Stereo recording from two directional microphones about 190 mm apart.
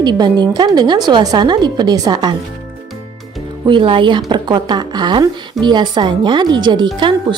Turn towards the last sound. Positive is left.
turn(degrees=-25)  # may be behind; listen again after turning